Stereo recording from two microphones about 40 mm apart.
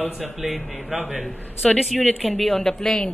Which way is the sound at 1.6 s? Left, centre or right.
Centre.